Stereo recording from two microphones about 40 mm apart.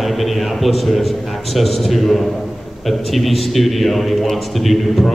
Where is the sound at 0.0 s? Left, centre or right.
Centre.